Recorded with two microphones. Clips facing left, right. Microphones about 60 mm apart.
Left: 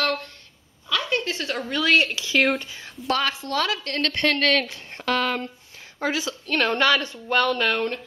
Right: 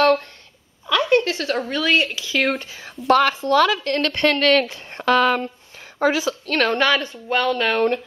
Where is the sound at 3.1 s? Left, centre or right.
Right.